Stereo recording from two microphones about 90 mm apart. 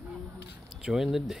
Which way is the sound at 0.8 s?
5° right (ahead or behind).